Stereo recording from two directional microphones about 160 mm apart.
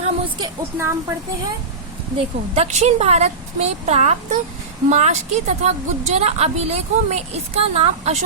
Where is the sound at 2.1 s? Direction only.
45° right (ahead or behind).